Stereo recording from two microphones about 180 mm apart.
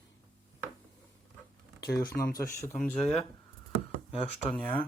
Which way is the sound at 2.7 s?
Centre (ahead or behind).